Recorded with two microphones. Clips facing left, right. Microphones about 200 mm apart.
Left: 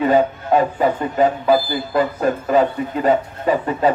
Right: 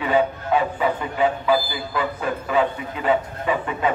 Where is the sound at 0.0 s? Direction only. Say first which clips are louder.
Left 5 dB; 40° left (ahead or behind).